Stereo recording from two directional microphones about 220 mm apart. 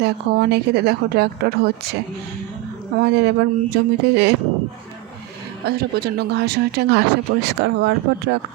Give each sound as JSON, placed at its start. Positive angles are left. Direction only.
{"t": 0.0, "sound": "speech", "side_deg": -50}
{"t": 3.0, "sound": "speech", "side_deg": -50}
{"t": 5.6, "sound": "speech", "side_deg": -45}